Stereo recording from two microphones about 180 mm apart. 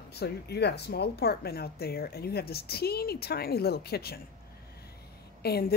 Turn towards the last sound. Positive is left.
turn(degrees=60)  # may be behind; listen again after turning